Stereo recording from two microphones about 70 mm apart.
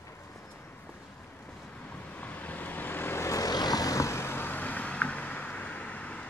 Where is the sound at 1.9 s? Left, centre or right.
Left.